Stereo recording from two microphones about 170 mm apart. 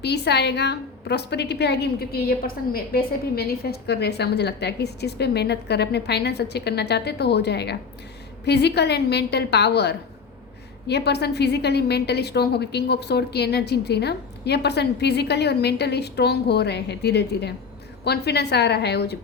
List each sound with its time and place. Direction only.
0.0 s a woman's voice: 80° left